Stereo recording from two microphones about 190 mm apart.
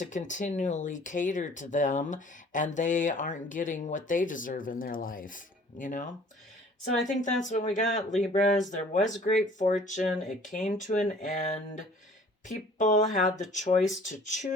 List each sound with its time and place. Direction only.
0.0 s speech: 40° left (ahead or behind)
7.1 s speech: 40° left (ahead or behind)